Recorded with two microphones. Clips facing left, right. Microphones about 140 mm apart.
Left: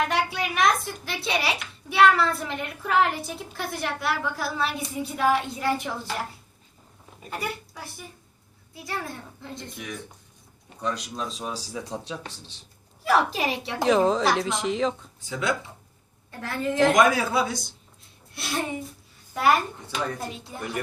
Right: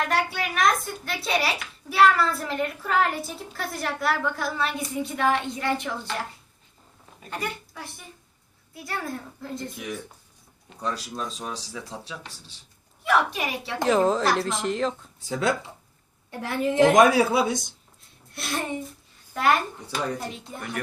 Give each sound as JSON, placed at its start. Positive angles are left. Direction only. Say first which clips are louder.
{"t": 0.1, "sound": "a child's voice", "louder": "even", "side_deg": 0}
{"t": 7.3, "sound": "a child's voice", "louder": "even", "side_deg": 5}
{"t": 11.7, "sound": "speech", "louder": "left 4 dB", "side_deg": 20}
{"t": 13.1, "sound": "speech", "louder": "left 1 dB", "side_deg": 35}
{"t": 13.7, "sound": "a child's voice", "louder": "even", "side_deg": 0}
{"t": 15.3, "sound": "speech", "louder": "right 2 dB", "side_deg": -40}
{"t": 16.4, "sound": "speech", "louder": "right 3 dB", "side_deg": -25}
{"t": 18.3, "sound": "a child's voice", "louder": "even", "side_deg": 0}
{"t": 19.3, "sound": "a child's voice", "louder": "left 1 dB", "side_deg": 10}